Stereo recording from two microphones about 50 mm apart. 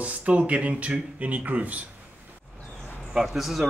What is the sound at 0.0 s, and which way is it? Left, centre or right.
Speech, right.